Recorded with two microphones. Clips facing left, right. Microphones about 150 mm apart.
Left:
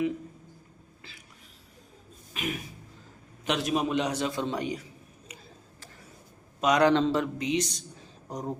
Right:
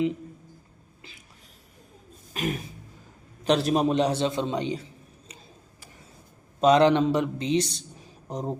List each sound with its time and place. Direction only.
2.3 s music: 40° right (ahead or behind)
3.4 s a man's voice: 35° right (ahead or behind)
6.6 s a man's voice: 25° right (ahead or behind)
7.3 s a man's voice: 30° right (ahead or behind)